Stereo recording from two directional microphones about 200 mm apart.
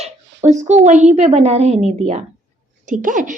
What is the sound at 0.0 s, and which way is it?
A woman's voice, 35° right (ahead or behind).